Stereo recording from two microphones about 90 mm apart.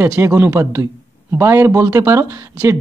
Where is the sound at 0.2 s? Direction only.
30° right (ahead or behind).